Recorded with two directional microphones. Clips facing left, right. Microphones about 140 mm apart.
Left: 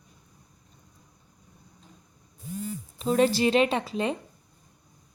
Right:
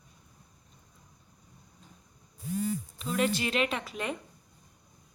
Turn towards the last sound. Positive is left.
turn(degrees=30)  # may be behind; listen again after turning